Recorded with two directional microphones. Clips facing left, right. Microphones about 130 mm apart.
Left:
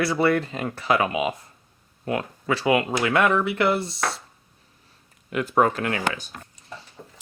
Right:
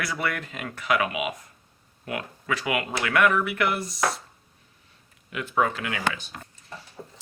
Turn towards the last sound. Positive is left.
turn(degrees=-5)  # may be behind; listen again after turning